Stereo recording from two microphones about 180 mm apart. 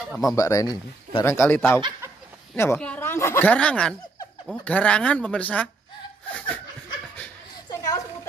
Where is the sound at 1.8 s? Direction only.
25° right (ahead or behind).